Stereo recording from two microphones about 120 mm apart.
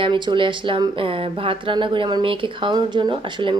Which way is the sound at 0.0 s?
45° right (ahead or behind).